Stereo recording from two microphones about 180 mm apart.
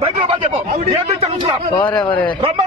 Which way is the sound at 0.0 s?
30° right (ahead or behind).